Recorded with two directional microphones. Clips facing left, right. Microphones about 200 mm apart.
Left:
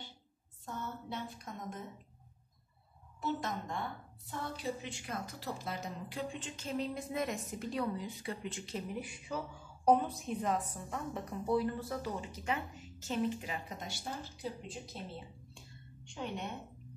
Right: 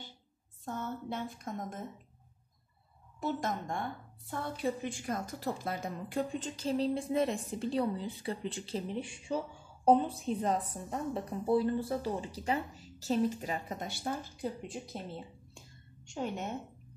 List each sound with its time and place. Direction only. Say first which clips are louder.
0.7 s speech: right 4 dB; 50° right (ahead or behind)
3.2 s a woman's voice: right 3 dB; 50° right (ahead or behind)
15.5 s a sound: left 1 dB; 45° right (ahead or behind)